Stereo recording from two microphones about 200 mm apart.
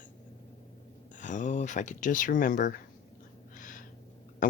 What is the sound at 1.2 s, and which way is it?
Speech, 40° left (ahead or behind).